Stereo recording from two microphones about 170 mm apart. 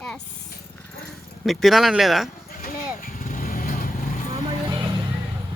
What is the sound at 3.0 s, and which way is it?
Vehicle, 55° left (ahead or behind).